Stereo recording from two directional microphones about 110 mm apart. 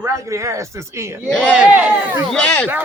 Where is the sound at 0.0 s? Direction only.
30° right (ahead or behind).